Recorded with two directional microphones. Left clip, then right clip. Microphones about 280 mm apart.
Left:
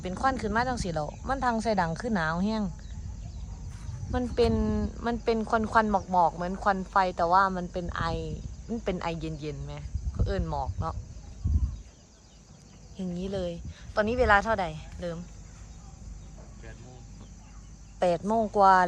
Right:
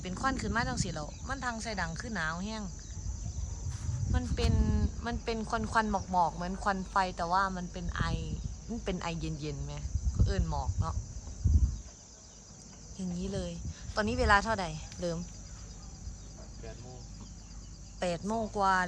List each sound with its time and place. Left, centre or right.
0.0 s speech: centre
4.1 s speech: centre
13.0 s speech: centre
18.0 s speech: centre